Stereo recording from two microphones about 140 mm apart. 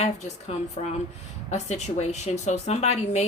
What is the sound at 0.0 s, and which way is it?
A woman's voice, 50° left (ahead or behind).